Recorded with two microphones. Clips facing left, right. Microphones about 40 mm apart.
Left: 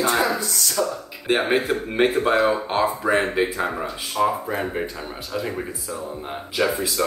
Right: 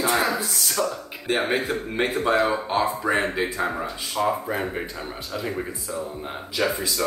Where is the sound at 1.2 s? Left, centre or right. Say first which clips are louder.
Left 3 dB; centre.